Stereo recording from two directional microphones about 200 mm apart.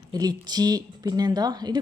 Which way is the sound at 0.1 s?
20° right (ahead or behind).